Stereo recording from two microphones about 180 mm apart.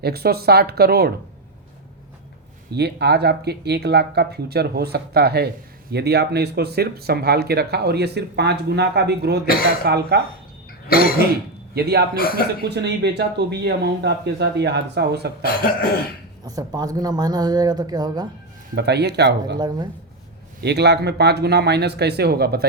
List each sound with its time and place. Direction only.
0.0 s speech: 60° right (ahead or behind)
2.7 s speech: 65° right (ahead or behind)
10.8 s throat clearing: 55° left (ahead or behind)
11.7 s speech: 60° right (ahead or behind)
15.4 s cough: 55° left (ahead or behind)
16.5 s speech: 20° right (ahead or behind)
18.7 s speech: 65° right (ahead or behind)
19.5 s speech: 20° right (ahead or behind)
20.6 s speech: 65° right (ahead or behind)